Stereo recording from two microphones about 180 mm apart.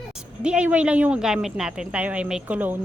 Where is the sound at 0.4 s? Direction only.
5° right (ahead or behind).